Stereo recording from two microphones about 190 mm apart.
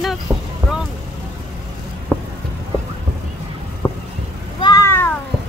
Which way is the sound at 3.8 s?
20° left (ahead or behind).